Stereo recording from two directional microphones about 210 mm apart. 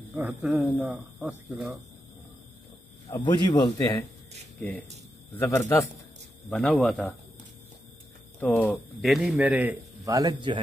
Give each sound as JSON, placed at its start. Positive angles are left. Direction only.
{"t": 0.2, "sound": "speech", "side_deg": -5}
{"t": 3.1, "sound": "a man's voice", "side_deg": 20}
{"t": 8.4, "sound": "speech", "side_deg": 5}